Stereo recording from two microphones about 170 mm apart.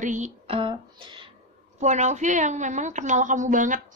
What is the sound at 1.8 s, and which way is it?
A woman's voice, 45° right (ahead or behind).